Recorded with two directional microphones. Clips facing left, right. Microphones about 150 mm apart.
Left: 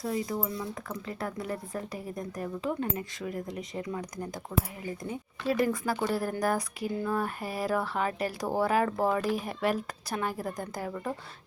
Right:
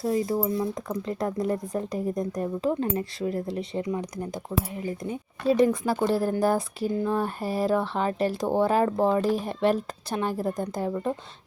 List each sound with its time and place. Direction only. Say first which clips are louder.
1.0 s speech: right 8 dB; 40° right (ahead or behind)
5.0 s speech: right 6 dB; 20° right (ahead or behind)